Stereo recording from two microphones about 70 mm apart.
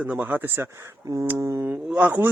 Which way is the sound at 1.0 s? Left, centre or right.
Right.